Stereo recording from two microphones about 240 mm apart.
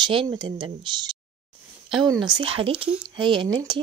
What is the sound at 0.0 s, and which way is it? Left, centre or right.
Speech, centre.